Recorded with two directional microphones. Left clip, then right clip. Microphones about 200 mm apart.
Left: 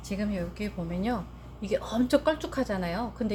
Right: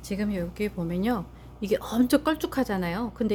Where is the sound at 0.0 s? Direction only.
60° right (ahead or behind).